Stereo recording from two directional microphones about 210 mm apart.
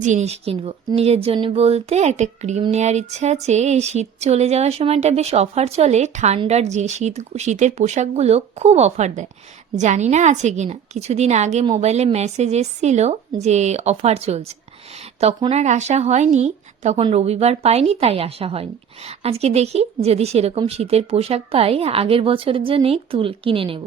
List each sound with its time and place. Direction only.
0.0 s a woman's voice: 35° right (ahead or behind)